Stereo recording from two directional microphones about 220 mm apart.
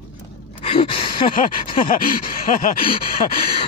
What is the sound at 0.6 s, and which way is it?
Gasp, 25° left (ahead or behind).